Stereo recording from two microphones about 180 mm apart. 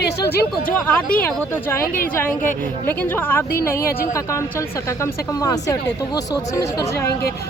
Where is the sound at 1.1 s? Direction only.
5° left (ahead or behind).